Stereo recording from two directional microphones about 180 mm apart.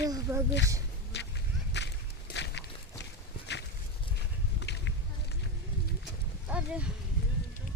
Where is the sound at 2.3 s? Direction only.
75° left (ahead or behind).